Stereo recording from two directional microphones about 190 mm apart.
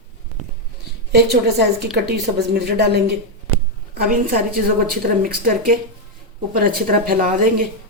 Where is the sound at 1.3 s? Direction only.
60° right (ahead or behind).